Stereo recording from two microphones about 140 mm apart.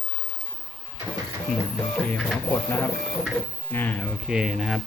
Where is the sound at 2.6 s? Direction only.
15° left (ahead or behind).